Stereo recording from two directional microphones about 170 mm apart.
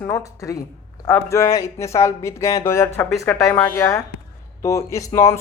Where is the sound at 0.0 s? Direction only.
20° left (ahead or behind).